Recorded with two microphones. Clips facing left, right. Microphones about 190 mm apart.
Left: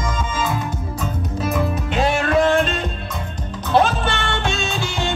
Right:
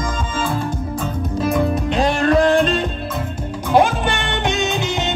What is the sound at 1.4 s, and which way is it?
Music, centre (ahead or behind).